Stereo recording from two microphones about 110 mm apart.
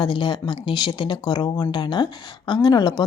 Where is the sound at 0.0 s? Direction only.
45° left (ahead or behind).